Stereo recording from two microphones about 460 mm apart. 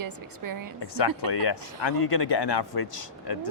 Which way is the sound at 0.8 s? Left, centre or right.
Left.